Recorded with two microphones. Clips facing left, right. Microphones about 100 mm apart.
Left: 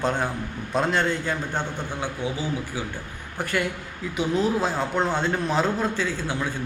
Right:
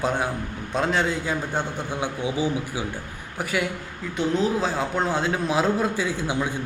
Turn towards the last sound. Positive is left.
turn(degrees=-15)  # may be behind; listen again after turning